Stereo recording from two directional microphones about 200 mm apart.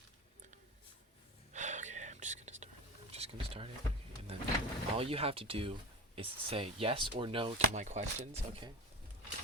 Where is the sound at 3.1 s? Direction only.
30° right (ahead or behind).